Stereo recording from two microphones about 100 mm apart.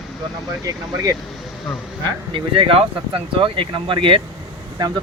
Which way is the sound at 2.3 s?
60° right (ahead or behind).